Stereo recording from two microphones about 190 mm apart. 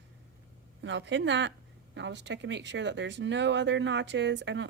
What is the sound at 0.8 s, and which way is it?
Speech, 70° right (ahead or behind).